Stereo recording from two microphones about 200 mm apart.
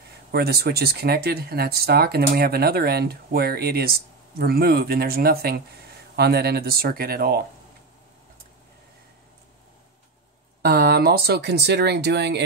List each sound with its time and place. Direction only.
0.3 s speech: 50° right (ahead or behind)
10.6 s speech: 50° right (ahead or behind)